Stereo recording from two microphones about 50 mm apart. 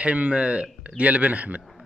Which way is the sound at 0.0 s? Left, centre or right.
Right.